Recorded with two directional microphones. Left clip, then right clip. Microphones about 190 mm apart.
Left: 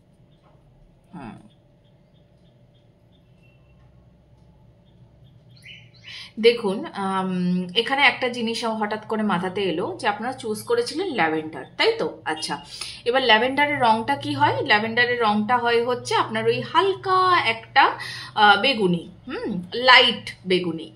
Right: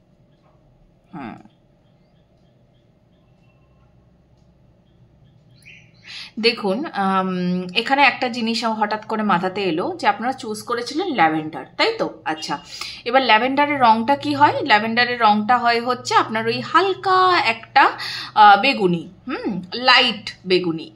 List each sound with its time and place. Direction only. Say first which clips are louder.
1.1 s speech: right 6 dB; 25° right (ahead or behind)
6.0 s speech: left 2 dB; 20° right (ahead or behind)